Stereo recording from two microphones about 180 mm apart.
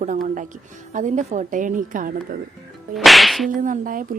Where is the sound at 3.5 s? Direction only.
45° right (ahead or behind).